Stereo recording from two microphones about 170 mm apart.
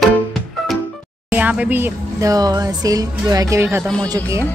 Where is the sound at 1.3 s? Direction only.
10° right (ahead or behind).